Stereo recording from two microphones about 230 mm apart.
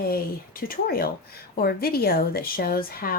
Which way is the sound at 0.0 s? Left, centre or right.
Left.